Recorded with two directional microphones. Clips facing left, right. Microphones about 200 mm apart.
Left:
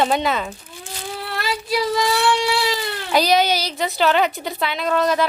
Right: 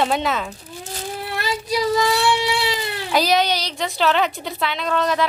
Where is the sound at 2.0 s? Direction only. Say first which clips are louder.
Even; 20° right (ahead or behind).